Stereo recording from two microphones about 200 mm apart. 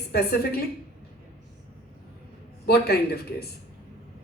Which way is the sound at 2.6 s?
50° left (ahead or behind).